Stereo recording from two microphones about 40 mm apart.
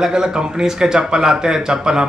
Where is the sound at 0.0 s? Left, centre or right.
Centre.